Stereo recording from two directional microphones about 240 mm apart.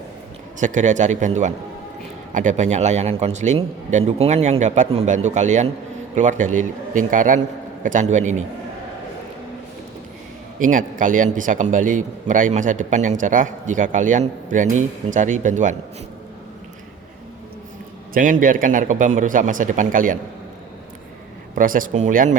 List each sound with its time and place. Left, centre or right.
0.6 s a man's voice: right
10.6 s a man's voice: right
18.1 s a man's voice: right
21.5 s a man's voice: right